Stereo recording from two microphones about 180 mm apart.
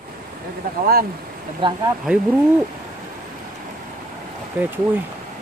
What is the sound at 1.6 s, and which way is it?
Speech, 25° right (ahead or behind).